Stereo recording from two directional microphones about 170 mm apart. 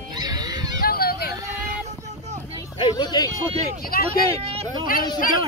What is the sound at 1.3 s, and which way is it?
Vehicle, 20° right (ahead or behind).